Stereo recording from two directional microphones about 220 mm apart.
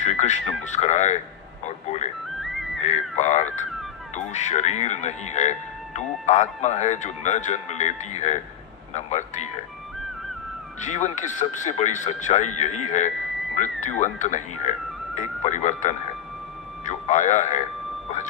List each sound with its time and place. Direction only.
0.0 s radio: 30° left (ahead or behind)
1.6 s music: 30° left (ahead or behind)
2.4 s music: centre (ahead or behind)
2.8 s a sound: 30° left (ahead or behind)
4.1 s cat: 30° left (ahead or behind)
9.0 s speech: 30° left (ahead or behind)
10.8 s speech: 35° left (ahead or behind)